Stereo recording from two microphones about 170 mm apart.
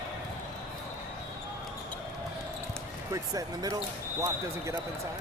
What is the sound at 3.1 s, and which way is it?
Speech, 20° right (ahead or behind).